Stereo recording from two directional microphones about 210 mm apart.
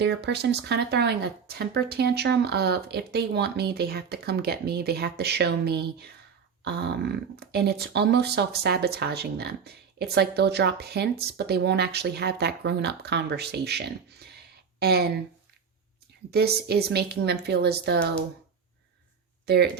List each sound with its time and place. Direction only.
0.0 s speech: 55° right (ahead or behind)
16.3 s speech: 50° right (ahead or behind)
19.5 s speech: 50° right (ahead or behind)